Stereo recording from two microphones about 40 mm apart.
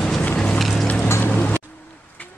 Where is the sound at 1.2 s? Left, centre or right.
Left.